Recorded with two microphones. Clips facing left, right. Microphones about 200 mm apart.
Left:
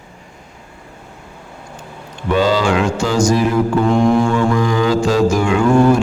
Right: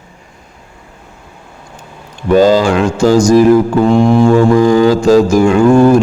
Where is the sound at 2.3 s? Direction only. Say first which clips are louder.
Right 6 dB; 45° right (ahead or behind).